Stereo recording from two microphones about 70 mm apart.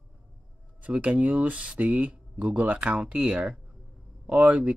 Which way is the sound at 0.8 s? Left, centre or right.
Centre.